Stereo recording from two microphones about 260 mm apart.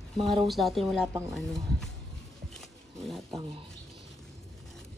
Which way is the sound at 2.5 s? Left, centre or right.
Centre.